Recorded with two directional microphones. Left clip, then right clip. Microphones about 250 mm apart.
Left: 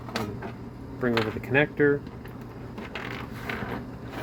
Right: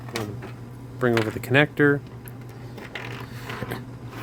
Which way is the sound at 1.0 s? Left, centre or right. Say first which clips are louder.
Right 4 dB; right.